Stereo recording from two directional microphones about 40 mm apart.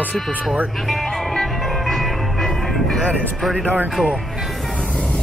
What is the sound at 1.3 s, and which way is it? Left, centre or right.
Music, centre.